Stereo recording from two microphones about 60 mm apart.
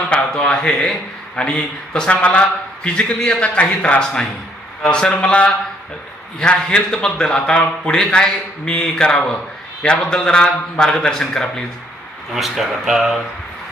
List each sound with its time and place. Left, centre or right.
0.1 s a man's voice: centre
6.7 s speech: centre
12.3 s speech: centre